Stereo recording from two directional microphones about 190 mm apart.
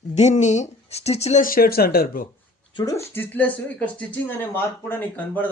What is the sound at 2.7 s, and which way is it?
Speech, 25° left (ahead or behind).